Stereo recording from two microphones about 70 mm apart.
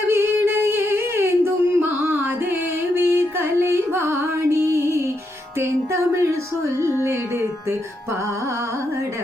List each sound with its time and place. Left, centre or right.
0.1 s singing: right
5.5 s music: right